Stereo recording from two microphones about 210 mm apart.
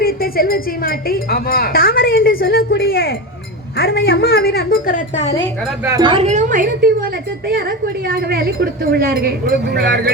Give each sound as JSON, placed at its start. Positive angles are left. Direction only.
{"t": 0.0, "sound": "speech", "side_deg": 45}
{"t": 5.8, "sound": "a woman's voice", "side_deg": -15}